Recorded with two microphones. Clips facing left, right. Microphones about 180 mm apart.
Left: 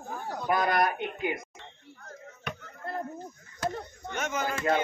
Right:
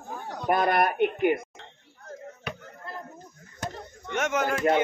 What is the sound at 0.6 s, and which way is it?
Speech, 55° right (ahead or behind).